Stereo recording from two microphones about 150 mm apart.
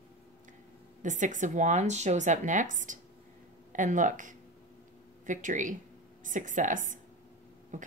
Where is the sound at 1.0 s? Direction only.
55° right (ahead or behind).